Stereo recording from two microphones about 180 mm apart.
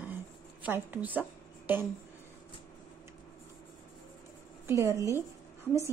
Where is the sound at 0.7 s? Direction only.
10° right (ahead or behind).